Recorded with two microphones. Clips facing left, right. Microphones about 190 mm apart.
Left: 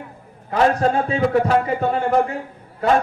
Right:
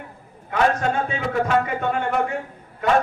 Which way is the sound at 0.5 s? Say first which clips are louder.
Left 3 dB; 35° left (ahead or behind).